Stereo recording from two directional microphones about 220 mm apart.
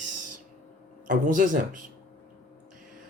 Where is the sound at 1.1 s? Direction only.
35° right (ahead or behind).